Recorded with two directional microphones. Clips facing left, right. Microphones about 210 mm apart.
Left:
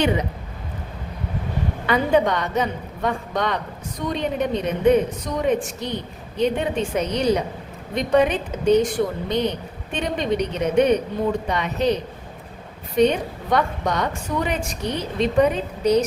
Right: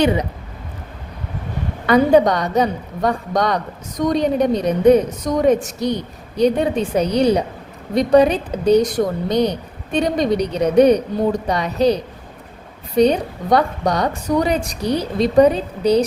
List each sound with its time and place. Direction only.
1.9 s a woman's voice: 40° right (ahead or behind)
13.0 s a woman's voice: 35° right (ahead or behind)